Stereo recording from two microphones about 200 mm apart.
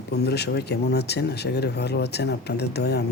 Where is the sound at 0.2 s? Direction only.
55° left (ahead or behind).